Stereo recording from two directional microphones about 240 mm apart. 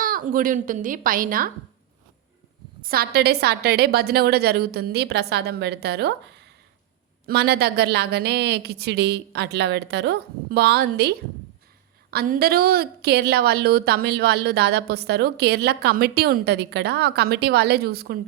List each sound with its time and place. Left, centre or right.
0.0 s a woman's voice: right
2.8 s a woman's voice: right
7.3 s a woman's voice: right
12.1 s a woman's voice: right